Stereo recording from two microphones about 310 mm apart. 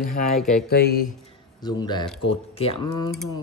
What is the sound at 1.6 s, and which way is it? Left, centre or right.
Speech, centre.